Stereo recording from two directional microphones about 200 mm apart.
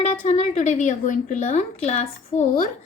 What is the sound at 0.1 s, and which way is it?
A woman's voice, 35° left (ahead or behind).